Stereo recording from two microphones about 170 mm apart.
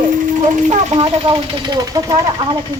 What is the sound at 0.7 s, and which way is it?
Speech, 30° right (ahead or behind).